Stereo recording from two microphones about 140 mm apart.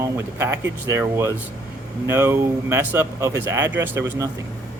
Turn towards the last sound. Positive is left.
turn(degrees=-20)  # may be behind; listen again after turning